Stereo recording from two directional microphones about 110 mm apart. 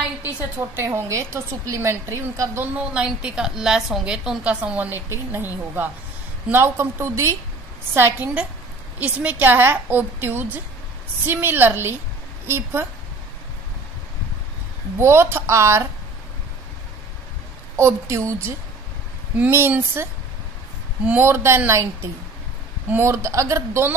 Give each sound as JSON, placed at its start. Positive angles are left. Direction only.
{"t": 0.2, "sound": "a woman's voice", "side_deg": -20}
{"t": 2.6, "sound": "a woman's voice", "side_deg": -10}
{"t": 6.5, "sound": "a woman's voice", "side_deg": -20}
{"t": 15.0, "sound": "a woman's voice", "side_deg": -25}
{"t": 17.7, "sound": "a woman's voice", "side_deg": -25}